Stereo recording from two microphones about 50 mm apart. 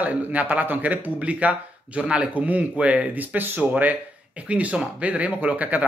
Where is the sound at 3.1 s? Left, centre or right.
Right.